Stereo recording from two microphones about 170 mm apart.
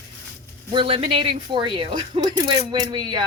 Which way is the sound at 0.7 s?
30° right (ahead or behind).